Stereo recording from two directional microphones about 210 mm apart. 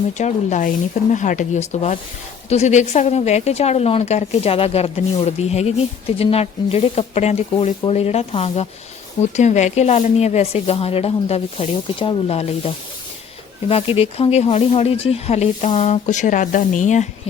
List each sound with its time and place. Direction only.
0.2 s a woman's voice: 35° left (ahead or behind)